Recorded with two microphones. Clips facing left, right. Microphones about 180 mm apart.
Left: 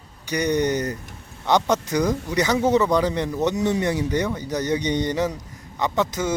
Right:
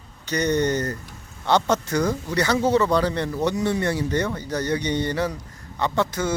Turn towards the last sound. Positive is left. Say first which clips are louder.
# even
turn(degrees=15)  # may be behind; listen again after turning